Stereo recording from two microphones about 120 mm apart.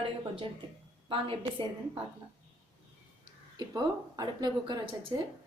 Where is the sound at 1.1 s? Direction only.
45° right (ahead or behind).